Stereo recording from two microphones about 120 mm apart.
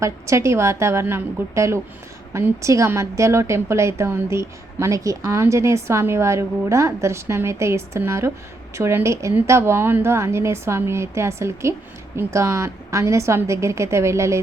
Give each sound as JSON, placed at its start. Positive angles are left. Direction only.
{"t": 0.0, "sound": "a woman's voice", "side_deg": -25}